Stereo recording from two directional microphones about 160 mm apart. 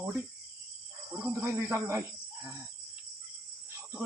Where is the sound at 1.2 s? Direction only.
15° right (ahead or behind).